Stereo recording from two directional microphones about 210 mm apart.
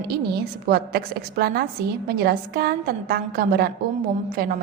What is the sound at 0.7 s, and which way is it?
A woman's voice, 50° right (ahead or behind).